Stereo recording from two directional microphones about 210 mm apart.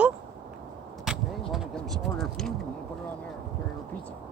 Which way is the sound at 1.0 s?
Centre (ahead or behind).